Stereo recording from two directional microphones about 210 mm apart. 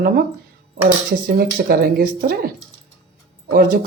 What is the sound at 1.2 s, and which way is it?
Speech, 45° right (ahead or behind).